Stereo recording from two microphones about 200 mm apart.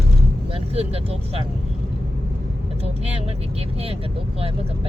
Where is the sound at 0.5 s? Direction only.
30° right (ahead or behind).